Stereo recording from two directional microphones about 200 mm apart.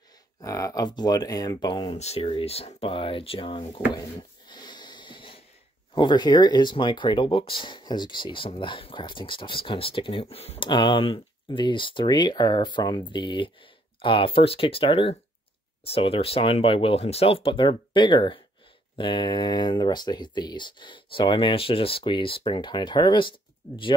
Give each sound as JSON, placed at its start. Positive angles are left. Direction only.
{"t": 0.4, "sound": "speech", "side_deg": 15}
{"t": 3.9, "sound": "a sound", "side_deg": 20}
{"t": 5.9, "sound": "speech", "side_deg": 20}